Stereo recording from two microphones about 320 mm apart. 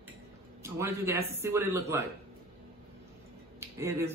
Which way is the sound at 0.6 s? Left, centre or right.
Centre.